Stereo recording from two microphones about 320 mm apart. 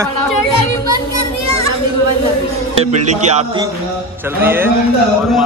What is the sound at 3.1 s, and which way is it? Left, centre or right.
Speech, right.